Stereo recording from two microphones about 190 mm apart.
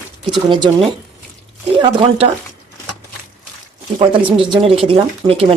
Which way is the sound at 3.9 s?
25° right (ahead or behind).